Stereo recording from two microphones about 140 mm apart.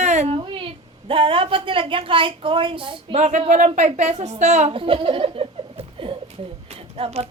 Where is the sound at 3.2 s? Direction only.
55° right (ahead or behind).